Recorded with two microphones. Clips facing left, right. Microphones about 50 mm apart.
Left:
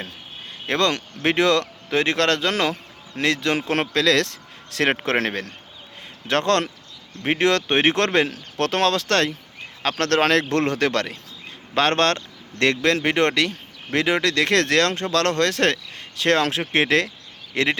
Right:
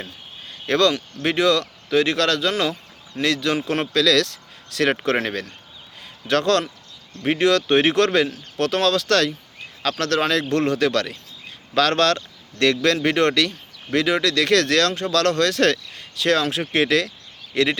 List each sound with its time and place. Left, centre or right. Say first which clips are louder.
0.7 s speech: right 3 dB; left
1.2 s speech: even; left
3.2 s a man's voice: even; left
10.0 s speech: left 3 dB; left